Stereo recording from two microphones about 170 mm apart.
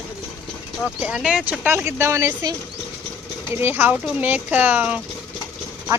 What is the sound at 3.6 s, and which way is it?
Speech, 10° right (ahead or behind).